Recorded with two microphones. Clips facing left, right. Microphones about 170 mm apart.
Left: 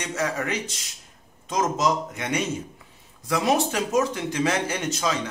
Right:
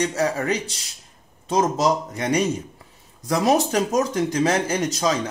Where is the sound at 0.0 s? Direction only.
35° right (ahead or behind).